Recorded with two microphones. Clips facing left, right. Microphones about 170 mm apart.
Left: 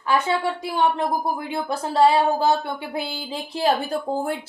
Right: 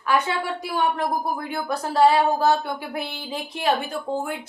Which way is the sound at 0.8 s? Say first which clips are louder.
Left 2 dB; 25° left (ahead or behind).